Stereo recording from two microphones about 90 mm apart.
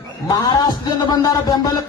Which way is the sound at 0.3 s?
55° left (ahead or behind).